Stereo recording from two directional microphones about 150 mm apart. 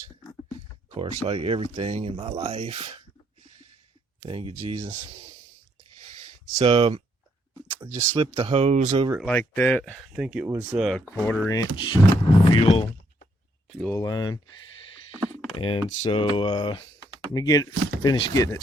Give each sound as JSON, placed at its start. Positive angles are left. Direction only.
{"t": 0.9, "sound": "speech", "side_deg": -40}
{"t": 4.2, "sound": "speech", "side_deg": -40}
{"t": 6.6, "sound": "speech", "side_deg": -35}
{"t": 8.1, "sound": "speech", "side_deg": -40}
{"t": 8.9, "sound": "speech", "side_deg": -30}
{"t": 9.2, "sound": "speech", "side_deg": 10}
{"t": 10.1, "sound": "speech", "side_deg": -5}
{"t": 11.0, "sound": "speech", "side_deg": 15}
{"t": 13.7, "sound": "speech", "side_deg": 0}
{"t": 13.9, "sound": "speech", "side_deg": 25}
{"t": 15.5, "sound": "speech", "side_deg": 35}